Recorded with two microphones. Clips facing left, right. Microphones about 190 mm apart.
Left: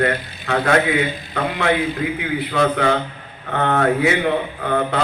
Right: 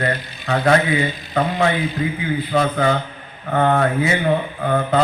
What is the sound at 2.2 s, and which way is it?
A man's voice, 70° left (ahead or behind).